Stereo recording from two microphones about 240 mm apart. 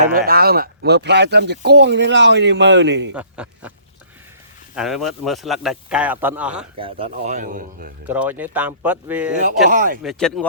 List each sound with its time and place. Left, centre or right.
0.0 s speech: right
3.1 s speech: centre
4.7 s speech: centre
7.0 s a man's voice: right
8.0 s speech: centre
9.6 s a man's voice: right
10.0 s speech: centre